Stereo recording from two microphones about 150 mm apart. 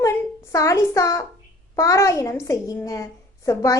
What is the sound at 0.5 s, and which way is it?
A woman's voice, 20° left (ahead or behind).